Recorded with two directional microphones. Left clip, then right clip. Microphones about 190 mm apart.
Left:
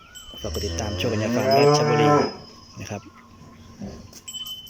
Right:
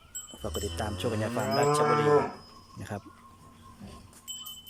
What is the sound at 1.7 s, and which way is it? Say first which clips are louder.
Livestock: left 6 dB; 35° left (ahead or behind).